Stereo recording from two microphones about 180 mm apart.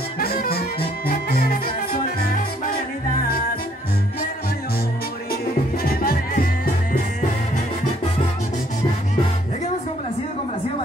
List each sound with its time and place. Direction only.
0.2 s music: 60° left (ahead or behind)
5.9 s music: 55° left (ahead or behind)